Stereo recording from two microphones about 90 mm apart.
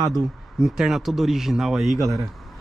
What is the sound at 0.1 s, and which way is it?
Speech, 5° right (ahead or behind).